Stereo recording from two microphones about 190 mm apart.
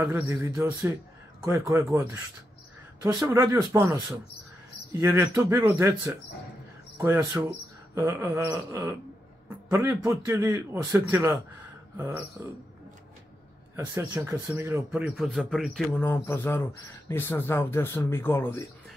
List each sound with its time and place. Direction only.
0.3 s a man's voice: 15° right (ahead or behind)
3.2 s a man's voice: 15° right (ahead or behind)
7.0 s a man's voice: 10° right (ahead or behind)
13.7 s a man's voice: 15° right (ahead or behind)
16.0 s speech: 10° left (ahead or behind)